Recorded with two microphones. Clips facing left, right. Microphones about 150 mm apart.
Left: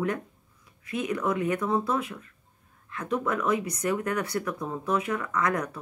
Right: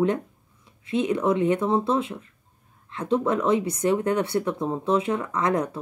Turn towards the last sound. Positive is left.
turn(degrees=-25)  # may be behind; listen again after turning